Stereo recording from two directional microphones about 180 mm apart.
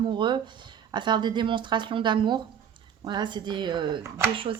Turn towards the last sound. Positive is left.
turn(degrees=-30)  # may be behind; listen again after turning